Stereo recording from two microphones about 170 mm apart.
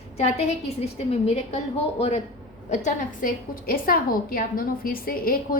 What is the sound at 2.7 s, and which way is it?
A woman's voice, 50° left (ahead or behind).